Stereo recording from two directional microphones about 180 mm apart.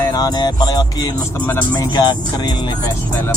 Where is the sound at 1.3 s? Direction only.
10° left (ahead or behind).